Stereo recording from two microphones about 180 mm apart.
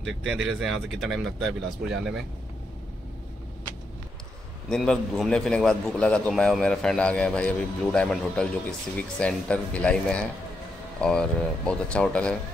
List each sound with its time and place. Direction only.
0.2 s a man's voice: 5° right (ahead or behind)
4.6 s a man's voice: 5° left (ahead or behind)